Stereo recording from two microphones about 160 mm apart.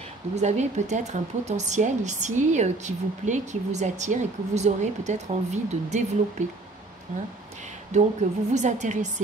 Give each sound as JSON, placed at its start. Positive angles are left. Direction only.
{"t": 0.4, "sound": "speech", "side_deg": -45}
{"t": 7.9, "sound": "speech", "side_deg": -45}